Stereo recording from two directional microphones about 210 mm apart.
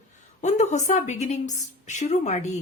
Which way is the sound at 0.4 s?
35° left (ahead or behind).